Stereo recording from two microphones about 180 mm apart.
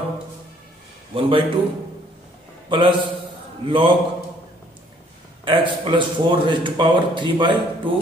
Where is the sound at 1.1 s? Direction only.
30° right (ahead or behind).